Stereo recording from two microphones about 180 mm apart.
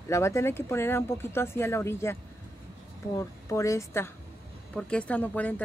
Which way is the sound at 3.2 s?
15° left (ahead or behind).